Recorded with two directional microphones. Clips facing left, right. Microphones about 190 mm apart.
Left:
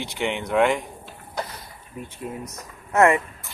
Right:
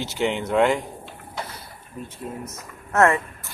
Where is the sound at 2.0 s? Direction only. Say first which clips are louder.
Even; 15° left (ahead or behind).